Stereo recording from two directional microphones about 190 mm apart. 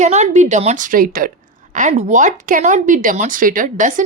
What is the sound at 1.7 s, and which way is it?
Speech, 40° right (ahead or behind).